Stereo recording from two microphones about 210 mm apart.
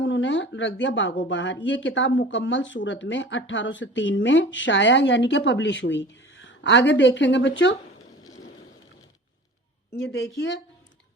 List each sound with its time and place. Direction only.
0.0 s speech: 60° left (ahead or behind)
10.0 s speech: 55° left (ahead or behind)